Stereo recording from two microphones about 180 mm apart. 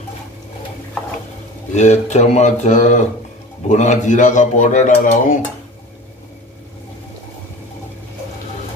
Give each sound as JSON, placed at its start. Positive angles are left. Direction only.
{"t": 1.8, "sound": "speech", "side_deg": 40}